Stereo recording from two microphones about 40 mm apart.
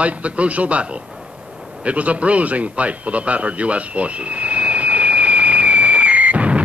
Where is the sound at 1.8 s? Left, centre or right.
Right.